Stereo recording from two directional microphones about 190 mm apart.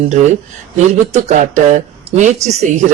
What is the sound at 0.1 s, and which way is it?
Speech, 40° right (ahead or behind).